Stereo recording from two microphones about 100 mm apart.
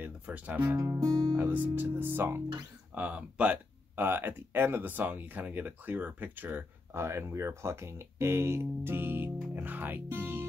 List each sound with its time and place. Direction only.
0.0 s speech: 15° right (ahead or behind)
0.7 s speech: 30° right (ahead or behind)
1.3 s speech: 15° right (ahead or behind)